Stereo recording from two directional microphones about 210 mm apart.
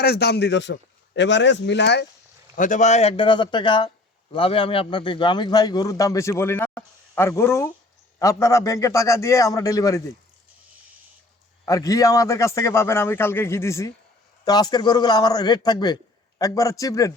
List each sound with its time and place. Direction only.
0.0 s a man's voice: 50° left (ahead or behind)
2.6 s a man's voice: 35° left (ahead or behind); by 10.0 s 15° left (ahead or behind)
11.6 s a man's voice: 15° left (ahead or behind)